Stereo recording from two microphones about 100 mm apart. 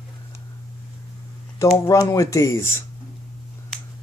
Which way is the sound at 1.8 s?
35° left (ahead or behind).